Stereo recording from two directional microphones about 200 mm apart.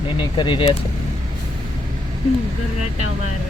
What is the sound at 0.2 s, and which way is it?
Speech, 25° left (ahead or behind).